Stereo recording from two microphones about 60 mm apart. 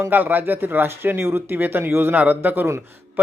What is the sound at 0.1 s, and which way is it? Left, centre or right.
Speech, right.